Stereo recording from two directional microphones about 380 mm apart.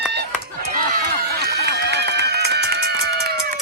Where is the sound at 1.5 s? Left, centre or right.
Right.